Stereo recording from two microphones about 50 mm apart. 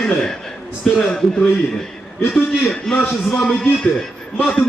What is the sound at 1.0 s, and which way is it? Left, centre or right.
A man's voice, centre.